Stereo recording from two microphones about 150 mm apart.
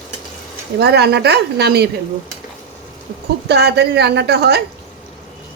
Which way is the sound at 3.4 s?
90° right.